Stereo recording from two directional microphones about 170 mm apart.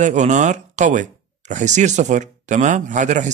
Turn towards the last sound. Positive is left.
turn(degrees=-45)  # may be behind; listen again after turning